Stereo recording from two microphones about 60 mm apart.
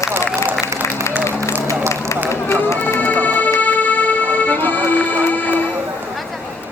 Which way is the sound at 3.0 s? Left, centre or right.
Left.